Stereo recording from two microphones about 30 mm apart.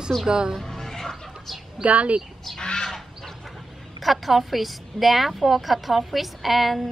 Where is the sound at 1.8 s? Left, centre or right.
Right.